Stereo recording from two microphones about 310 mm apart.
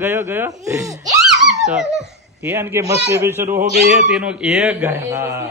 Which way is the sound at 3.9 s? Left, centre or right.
Centre.